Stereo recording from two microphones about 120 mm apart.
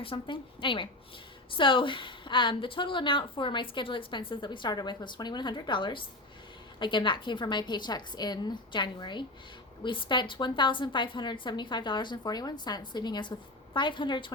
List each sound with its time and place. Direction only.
0.0 s a woman's voice: 45° left (ahead or behind)